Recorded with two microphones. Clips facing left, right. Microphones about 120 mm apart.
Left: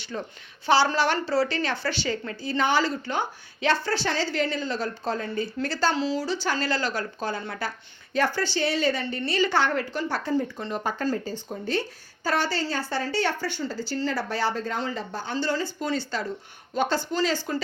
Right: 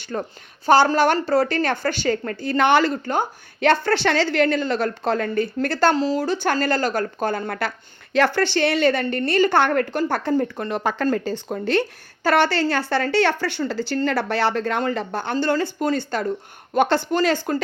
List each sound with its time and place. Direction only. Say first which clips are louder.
0.0 s speech: right 6 dB; 50° right (ahead or behind)
8.1 s a woman's voice: right 6 dB; 75° right (ahead or behind); by 16.2 s 50° right (ahead or behind)
16.7 s speech: right 6 dB; 65° right (ahead or behind)